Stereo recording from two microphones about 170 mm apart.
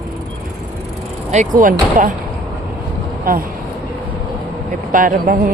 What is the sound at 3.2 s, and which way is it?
Speech, 55° right (ahead or behind).